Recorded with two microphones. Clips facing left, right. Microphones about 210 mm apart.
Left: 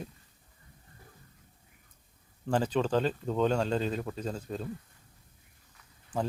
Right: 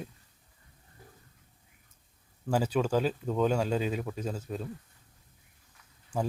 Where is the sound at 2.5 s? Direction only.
10° right (ahead or behind).